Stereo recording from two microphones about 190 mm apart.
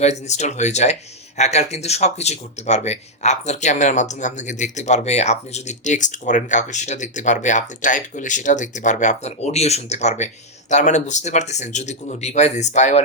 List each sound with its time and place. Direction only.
0.0 s speech: 35° left (ahead or behind)